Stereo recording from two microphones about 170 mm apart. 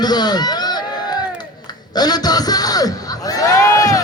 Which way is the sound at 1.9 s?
25° left (ahead or behind).